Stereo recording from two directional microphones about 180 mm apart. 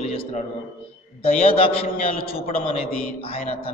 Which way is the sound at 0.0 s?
35° left (ahead or behind).